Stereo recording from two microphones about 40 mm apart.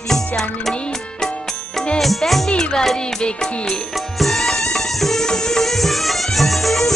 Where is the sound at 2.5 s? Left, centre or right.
Centre.